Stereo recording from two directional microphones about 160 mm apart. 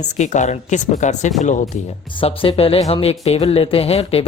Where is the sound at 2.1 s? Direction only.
35° left (ahead or behind).